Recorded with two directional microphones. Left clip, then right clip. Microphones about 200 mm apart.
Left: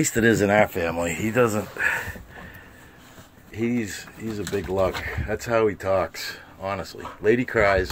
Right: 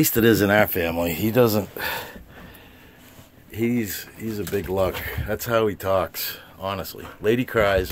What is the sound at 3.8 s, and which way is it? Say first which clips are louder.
Speech: right 1 dB; 20° right (ahead or behind).